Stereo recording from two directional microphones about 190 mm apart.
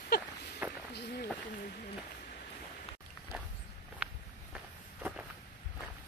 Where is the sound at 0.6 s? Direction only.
10° right (ahead or behind).